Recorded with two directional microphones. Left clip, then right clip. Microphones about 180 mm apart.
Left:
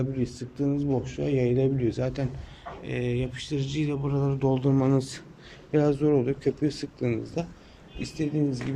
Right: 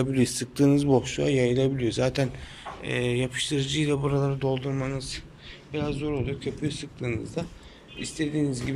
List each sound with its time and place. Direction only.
0.0 s speech: 5° right (ahead or behind); by 4.9 s 25° left (ahead or behind)
4.9 s a man's voice: 35° left (ahead or behind)
7.9 s speech: 10° left (ahead or behind)